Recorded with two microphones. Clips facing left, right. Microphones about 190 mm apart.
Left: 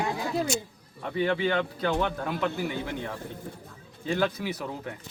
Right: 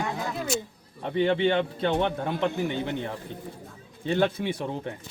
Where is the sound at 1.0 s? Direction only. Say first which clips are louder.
Right 3 dB; 25° right (ahead or behind).